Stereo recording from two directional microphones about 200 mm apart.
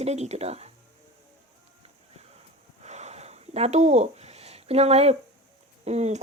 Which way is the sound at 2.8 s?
35° right (ahead or behind).